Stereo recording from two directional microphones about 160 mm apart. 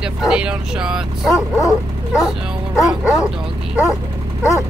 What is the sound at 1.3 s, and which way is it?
Dog, 20° left (ahead or behind).